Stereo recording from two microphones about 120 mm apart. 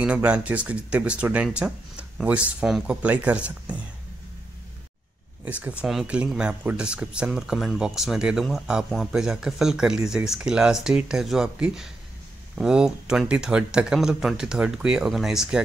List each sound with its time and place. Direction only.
0.0 s speech: 10° right (ahead or behind)
5.4 s speech: 10° right (ahead or behind)